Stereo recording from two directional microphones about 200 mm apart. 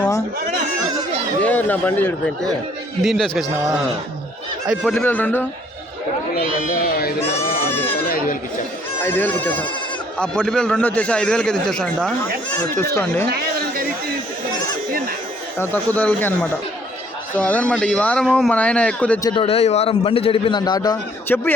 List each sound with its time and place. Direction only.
1.4 s a man's voice: 10° left (ahead or behind)
4.7 s a man's voice: centre (ahead or behind)
6.8 s speech: 50° left (ahead or behind)
7.7 s baby cry: 10° left (ahead or behind)
8.0 s a sound: 50° left (ahead or behind)
9.0 s a man's voice: 10° left (ahead or behind)
13.2 s chatter: 50° right (ahead or behind)
15.5 s a man's voice: 10° left (ahead or behind)
19.2 s a man's voice: 25° left (ahead or behind)